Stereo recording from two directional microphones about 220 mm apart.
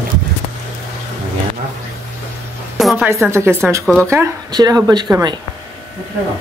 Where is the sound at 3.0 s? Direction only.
10° right (ahead or behind).